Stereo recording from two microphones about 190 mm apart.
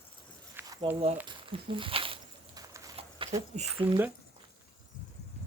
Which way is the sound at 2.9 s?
30° right (ahead or behind).